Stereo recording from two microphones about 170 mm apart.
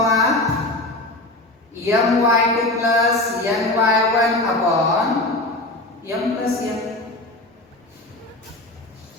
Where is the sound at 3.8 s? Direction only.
20° right (ahead or behind).